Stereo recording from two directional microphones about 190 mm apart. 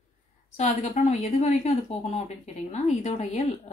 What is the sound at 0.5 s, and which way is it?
A woman's voice, 35° left (ahead or behind).